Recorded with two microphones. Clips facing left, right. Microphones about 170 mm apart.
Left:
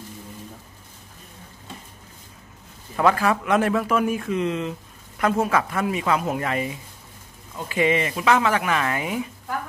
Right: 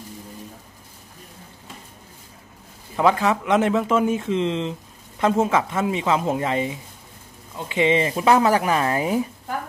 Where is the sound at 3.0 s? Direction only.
20° right (ahead or behind); by 9.2 s 35° right (ahead or behind).